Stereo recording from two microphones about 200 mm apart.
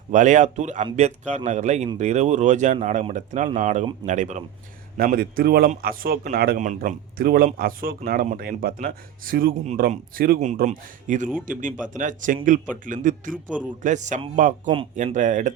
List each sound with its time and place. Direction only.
0.1 s speech: 40° right (ahead or behind)